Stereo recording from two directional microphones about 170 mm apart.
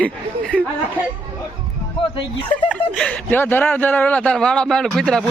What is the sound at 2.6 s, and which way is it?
Speech, 5° right (ahead or behind).